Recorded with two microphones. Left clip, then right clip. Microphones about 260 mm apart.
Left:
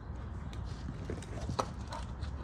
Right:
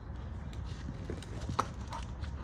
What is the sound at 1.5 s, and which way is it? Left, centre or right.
Clip-clop, right.